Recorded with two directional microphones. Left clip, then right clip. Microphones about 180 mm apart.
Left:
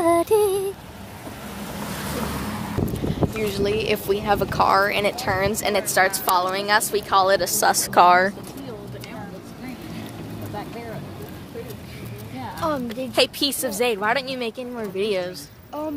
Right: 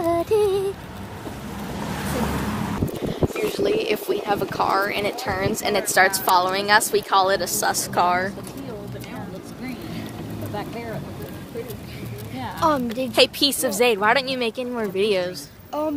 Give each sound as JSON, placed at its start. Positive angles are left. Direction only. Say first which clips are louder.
{"t": 0.0, "sound": "female singing", "louder": "left 2 dB", "side_deg": 25}
{"t": 3.4, "sound": "speech", "louder": "right 1 dB", "side_deg": 15}
{"t": 7.2, "sound": "a woman's voice", "louder": "left 3 dB", "side_deg": 30}
{"t": 7.9, "sound": "speech", "louder": "left 7 dB", "side_deg": 55}
{"t": 12.5, "sound": "a sound", "louder": "right 5 dB", "side_deg": -45}
{"t": 13.1, "sound": "speech", "louder": "right 3 dB", "side_deg": 5}
{"t": 15.8, "sound": "a sound", "louder": "right 4 dB", "side_deg": -45}